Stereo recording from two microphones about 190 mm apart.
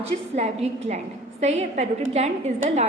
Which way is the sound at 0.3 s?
35° right (ahead or behind).